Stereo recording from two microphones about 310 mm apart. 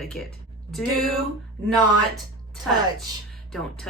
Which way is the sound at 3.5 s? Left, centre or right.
Centre.